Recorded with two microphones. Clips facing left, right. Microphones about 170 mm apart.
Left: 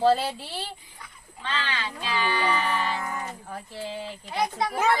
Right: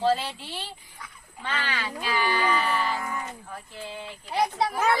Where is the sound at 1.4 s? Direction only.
10° right (ahead or behind).